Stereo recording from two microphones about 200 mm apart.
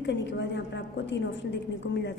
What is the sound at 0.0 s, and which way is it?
A woman's voice, 60° left (ahead or behind).